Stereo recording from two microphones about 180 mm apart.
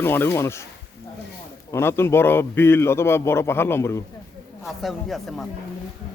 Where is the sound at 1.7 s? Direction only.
15° left (ahead or behind).